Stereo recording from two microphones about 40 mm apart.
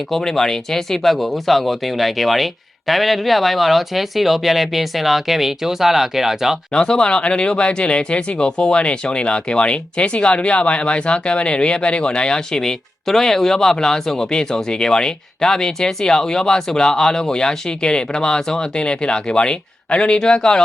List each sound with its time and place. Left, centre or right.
0.1 s speech: centre
6.7 s speech: centre